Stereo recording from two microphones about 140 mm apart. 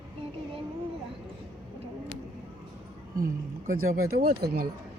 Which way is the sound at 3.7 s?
90° right.